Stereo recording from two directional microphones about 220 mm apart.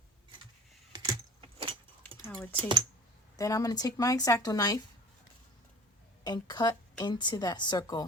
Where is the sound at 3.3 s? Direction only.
15° left (ahead or behind).